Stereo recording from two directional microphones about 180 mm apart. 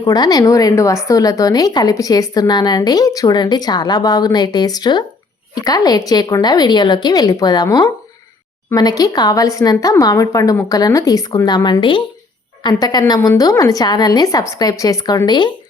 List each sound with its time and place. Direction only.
0.0 s a woman's voice: 20° left (ahead or behind)